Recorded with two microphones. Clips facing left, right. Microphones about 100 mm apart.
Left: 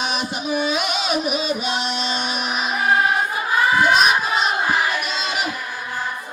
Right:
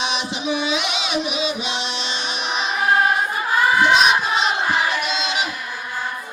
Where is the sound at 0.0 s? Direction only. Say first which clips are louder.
Even; 45° left (ahead or behind).